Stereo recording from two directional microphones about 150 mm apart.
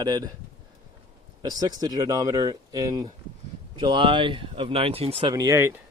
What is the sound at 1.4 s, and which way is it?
Speech, 25° right (ahead or behind).